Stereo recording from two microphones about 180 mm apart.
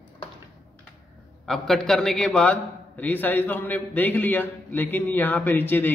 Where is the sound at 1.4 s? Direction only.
Centre (ahead or behind).